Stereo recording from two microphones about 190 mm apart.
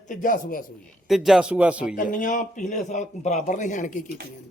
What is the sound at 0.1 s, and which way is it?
Speech, 45° left (ahead or behind).